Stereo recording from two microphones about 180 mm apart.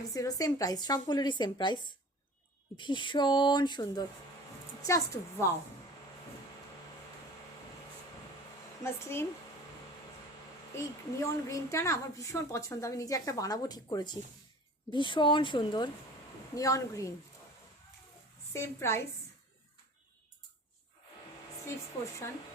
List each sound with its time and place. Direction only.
0.1 s a woman's voice: 20° left (ahead or behind)
8.8 s a woman's voice: 15° left (ahead or behind)
10.8 s a woman's voice: 15° left (ahead or behind)
18.5 s a woman's voice: 15° left (ahead or behind)